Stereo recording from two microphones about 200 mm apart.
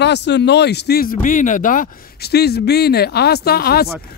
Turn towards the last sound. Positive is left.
turn(degrees=50)  # may be behind; listen again after turning